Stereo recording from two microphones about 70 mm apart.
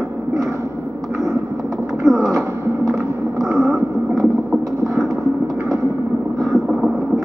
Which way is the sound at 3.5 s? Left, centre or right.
Right.